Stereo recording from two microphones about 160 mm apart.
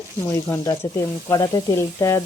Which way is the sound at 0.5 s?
20° left (ahead or behind).